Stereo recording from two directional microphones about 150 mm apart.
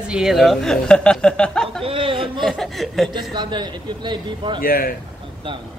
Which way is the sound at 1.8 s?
35° right (ahead or behind).